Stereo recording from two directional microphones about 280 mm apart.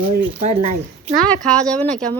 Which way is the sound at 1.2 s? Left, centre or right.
Centre.